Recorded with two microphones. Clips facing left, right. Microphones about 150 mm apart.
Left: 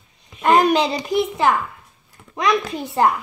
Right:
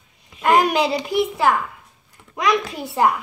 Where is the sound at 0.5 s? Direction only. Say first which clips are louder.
Left 1 dB; 10° right (ahead or behind).